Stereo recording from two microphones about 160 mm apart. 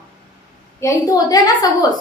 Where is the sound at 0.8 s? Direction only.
20° left (ahead or behind).